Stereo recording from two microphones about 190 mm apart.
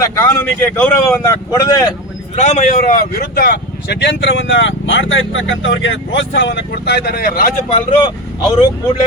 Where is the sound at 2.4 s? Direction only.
35° left (ahead or behind).